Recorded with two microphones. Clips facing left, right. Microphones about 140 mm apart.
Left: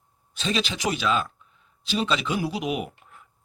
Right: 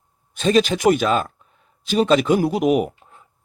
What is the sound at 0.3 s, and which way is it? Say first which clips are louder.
Speech: right 10 dB; 50° right (ahead or behind).